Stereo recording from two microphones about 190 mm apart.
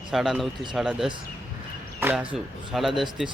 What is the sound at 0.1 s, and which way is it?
A man's voice, centre (ahead or behind).